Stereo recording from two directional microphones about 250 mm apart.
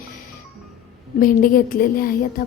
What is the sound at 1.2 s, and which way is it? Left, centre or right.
A woman's voice, left.